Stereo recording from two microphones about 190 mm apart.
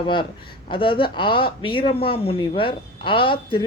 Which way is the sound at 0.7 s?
25° left (ahead or behind).